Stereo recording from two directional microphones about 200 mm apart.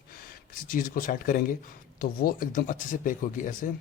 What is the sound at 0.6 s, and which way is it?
Speech, 45° left (ahead or behind).